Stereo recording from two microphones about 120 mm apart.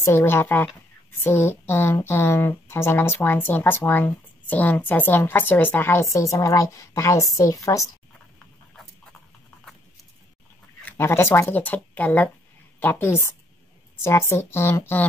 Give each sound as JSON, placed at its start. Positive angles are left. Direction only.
{"t": 0.0, "sound": "a woman's voice", "side_deg": 20}
{"t": 10.9, "sound": "a woman's voice", "side_deg": 20}